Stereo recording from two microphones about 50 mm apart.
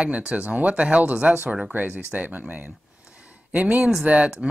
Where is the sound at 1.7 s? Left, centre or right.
Right; by 4.4 s centre.